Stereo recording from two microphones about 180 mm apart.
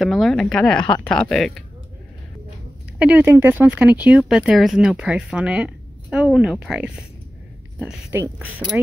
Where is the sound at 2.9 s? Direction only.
10° right (ahead or behind).